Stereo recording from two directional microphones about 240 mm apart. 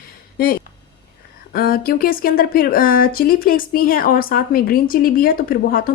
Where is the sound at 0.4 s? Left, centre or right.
Left.